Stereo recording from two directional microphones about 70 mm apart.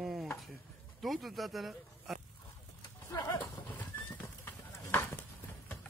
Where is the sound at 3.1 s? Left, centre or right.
Left.